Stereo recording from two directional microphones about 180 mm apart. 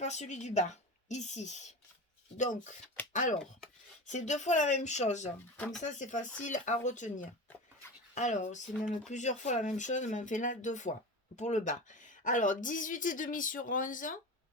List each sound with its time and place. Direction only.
0.0 s speech: 40° left (ahead or behind)
5.5 s speech: 5° left (ahead or behind)
5.8 s speech: 40° left (ahead or behind)